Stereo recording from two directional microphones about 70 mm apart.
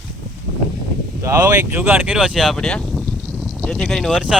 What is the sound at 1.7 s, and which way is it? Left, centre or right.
Speech, right.